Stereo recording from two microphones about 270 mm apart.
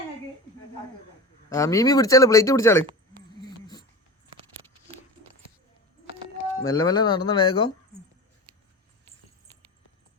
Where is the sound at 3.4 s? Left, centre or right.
Centre.